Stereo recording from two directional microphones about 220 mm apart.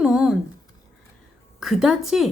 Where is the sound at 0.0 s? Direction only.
5° right (ahead or behind).